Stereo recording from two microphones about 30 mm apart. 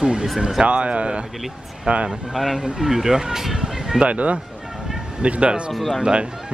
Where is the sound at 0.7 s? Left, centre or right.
Right.